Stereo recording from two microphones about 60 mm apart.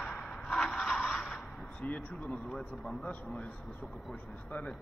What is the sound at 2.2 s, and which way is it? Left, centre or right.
Speech, centre.